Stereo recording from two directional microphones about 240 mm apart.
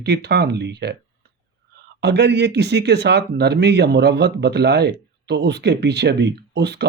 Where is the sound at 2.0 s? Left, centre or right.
Right.